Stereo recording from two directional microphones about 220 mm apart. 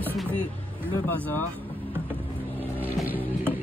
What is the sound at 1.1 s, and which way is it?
Speech, 5° left (ahead or behind).